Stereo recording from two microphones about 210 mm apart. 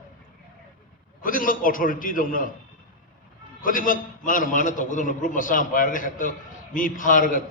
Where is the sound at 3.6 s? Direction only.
40° left (ahead or behind).